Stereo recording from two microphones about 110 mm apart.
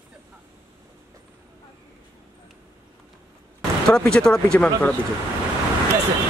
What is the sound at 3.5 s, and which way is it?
Speech, 5° left (ahead or behind).